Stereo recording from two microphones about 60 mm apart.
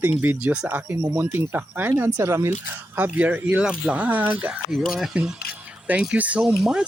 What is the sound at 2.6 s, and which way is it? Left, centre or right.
Speech, right.